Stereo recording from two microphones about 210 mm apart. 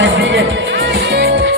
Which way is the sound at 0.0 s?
60° right (ahead or behind).